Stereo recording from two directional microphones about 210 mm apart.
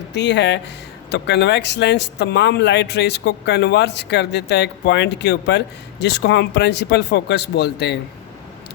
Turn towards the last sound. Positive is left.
turn(degrees=50)  # may be behind; listen again after turning